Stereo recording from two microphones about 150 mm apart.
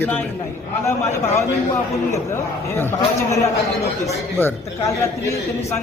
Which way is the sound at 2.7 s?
15° left (ahead or behind).